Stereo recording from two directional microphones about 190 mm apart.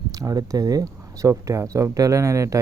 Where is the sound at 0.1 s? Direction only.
20° right (ahead or behind).